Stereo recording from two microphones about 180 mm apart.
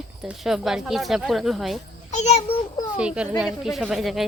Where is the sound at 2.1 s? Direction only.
35° left (ahead or behind).